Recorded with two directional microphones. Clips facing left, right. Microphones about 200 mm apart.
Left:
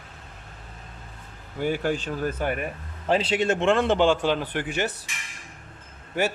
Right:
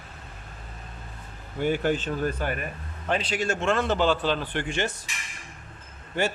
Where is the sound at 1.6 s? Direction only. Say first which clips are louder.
Right 1 dB; 5° left (ahead or behind).